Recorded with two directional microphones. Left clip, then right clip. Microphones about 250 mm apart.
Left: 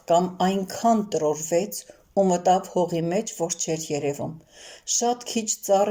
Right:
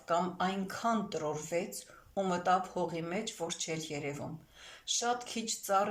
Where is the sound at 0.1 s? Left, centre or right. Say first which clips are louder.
Left 11 dB; left.